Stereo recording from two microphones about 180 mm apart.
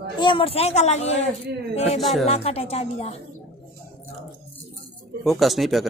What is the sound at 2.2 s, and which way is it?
Speech, 35° left (ahead or behind).